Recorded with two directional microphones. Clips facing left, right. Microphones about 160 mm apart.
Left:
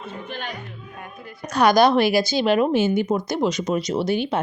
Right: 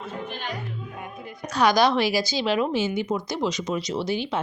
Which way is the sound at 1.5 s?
55° left (ahead or behind).